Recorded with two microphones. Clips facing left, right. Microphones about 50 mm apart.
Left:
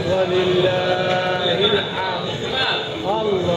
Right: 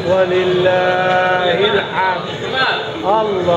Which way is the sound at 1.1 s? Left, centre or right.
Right.